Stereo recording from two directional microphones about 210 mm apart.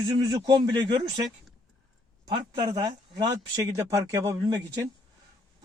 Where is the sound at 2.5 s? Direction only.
20° right (ahead or behind).